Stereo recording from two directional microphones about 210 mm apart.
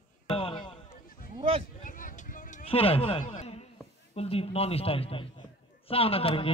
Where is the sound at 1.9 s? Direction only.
40° left (ahead or behind).